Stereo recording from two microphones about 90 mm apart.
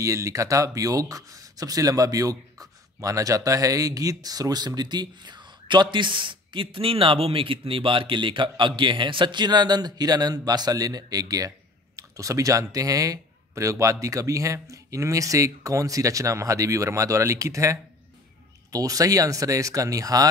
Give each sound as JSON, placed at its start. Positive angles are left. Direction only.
{"t": 0.0, "sound": "speech", "side_deg": -35}